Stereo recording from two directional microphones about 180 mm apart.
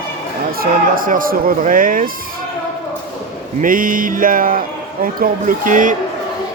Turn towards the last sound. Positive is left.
turn(degrees=-45)  # may be behind; listen again after turning